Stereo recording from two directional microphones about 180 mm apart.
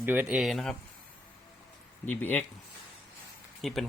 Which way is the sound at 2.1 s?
10° left (ahead or behind).